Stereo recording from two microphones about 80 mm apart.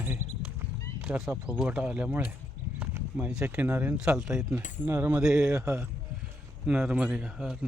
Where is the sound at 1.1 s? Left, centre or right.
Right.